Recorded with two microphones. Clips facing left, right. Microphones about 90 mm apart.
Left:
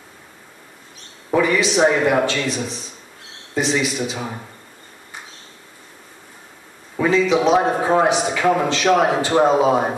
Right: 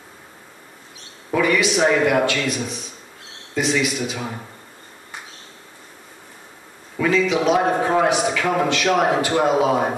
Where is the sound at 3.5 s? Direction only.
30° left (ahead or behind).